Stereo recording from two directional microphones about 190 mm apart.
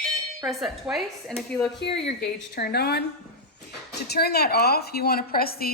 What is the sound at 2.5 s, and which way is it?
A woman's voice, 55° left (ahead or behind).